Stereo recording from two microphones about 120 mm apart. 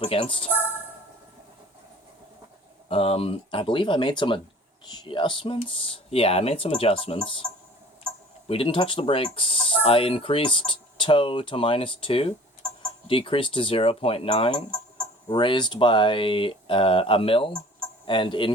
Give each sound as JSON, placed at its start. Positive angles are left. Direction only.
{"t": 0.0, "sound": "speech", "side_deg": 50}
{"t": 2.9, "sound": "speech", "side_deg": 55}
{"t": 8.4, "sound": "speech", "side_deg": 50}